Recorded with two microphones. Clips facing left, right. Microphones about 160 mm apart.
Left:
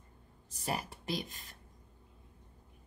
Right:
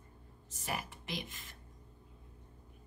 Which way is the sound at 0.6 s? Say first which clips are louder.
Left 3 dB; 35° left (ahead or behind).